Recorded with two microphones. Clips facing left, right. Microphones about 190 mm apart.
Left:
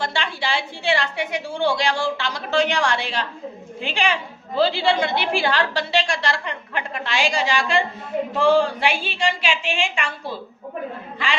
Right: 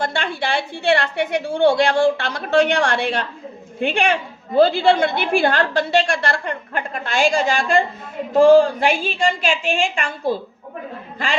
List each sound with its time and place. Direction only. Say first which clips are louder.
0.0 s a woman's voice: right 3 dB; 55° right (ahead or behind)